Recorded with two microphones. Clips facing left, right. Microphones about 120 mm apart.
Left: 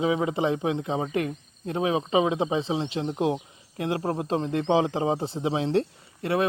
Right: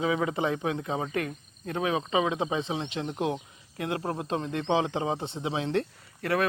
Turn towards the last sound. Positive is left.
turn(degrees=25)  # may be behind; listen again after turning